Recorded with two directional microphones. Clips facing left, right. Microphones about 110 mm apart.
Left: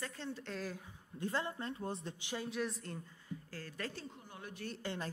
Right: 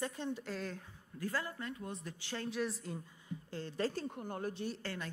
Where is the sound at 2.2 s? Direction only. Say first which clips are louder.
Left 1 dB; 15° left (ahead or behind).